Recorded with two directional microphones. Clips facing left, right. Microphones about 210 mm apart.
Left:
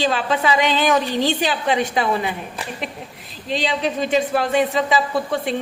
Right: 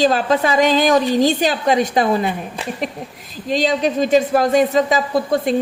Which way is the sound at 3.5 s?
40° right (ahead or behind).